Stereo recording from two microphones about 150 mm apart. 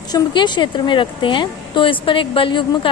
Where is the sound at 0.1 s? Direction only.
30° left (ahead or behind).